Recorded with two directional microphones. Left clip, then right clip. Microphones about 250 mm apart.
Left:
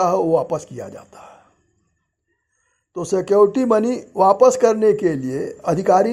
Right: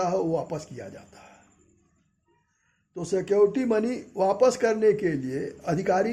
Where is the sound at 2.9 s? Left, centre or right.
Left.